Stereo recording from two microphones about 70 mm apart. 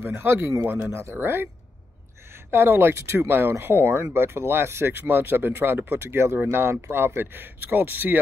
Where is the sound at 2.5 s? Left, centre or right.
Right.